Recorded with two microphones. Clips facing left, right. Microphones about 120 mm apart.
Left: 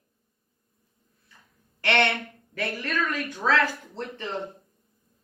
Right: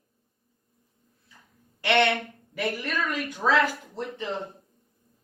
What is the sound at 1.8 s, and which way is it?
Speech, 10° right (ahead or behind).